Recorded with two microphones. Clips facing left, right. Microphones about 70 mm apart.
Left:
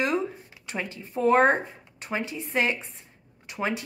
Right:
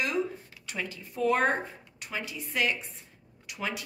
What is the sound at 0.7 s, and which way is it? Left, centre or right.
Speech, left.